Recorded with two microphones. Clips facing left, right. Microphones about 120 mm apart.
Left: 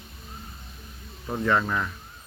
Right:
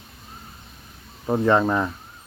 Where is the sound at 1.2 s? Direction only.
30° right (ahead or behind).